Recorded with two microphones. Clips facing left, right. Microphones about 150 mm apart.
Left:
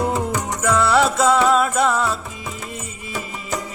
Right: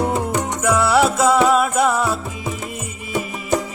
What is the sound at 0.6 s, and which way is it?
Music, 10° right (ahead or behind).